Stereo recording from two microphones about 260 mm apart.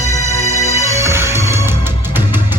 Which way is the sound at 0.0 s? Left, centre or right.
Centre.